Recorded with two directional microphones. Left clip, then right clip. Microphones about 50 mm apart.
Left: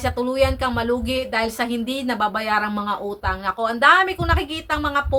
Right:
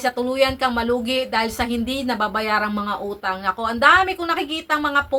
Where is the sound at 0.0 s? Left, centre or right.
Left.